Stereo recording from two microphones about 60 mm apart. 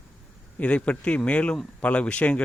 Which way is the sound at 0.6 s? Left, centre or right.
Left.